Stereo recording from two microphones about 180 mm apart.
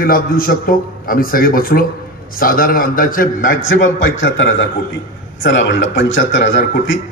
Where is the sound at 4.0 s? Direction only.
90° left.